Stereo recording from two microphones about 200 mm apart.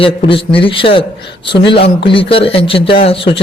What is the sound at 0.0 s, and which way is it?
A man's voice, 25° left (ahead or behind).